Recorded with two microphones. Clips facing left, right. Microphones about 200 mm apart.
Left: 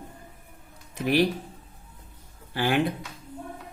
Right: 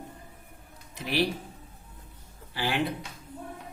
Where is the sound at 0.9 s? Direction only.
50° left (ahead or behind).